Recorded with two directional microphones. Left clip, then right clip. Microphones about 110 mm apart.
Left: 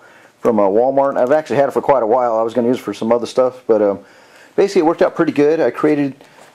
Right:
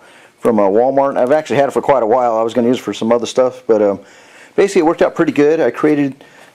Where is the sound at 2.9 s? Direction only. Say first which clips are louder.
Right 2 dB; 40° right (ahead or behind).